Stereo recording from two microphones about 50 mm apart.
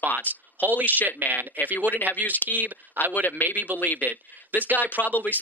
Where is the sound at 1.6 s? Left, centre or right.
Left.